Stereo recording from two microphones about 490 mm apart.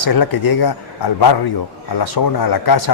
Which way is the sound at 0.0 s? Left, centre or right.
Left.